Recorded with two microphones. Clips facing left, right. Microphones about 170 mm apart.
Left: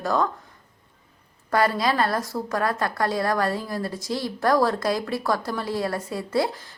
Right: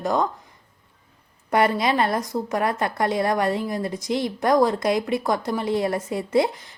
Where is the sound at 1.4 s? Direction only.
20° right (ahead or behind).